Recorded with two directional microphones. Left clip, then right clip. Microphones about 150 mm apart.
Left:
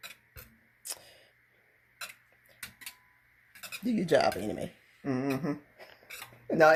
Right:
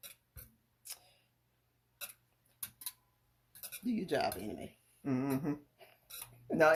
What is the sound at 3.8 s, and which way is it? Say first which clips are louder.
Speech: left 9 dB; 90° left.